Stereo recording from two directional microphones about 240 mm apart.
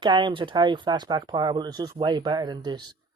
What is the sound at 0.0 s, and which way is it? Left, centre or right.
Speech, centre.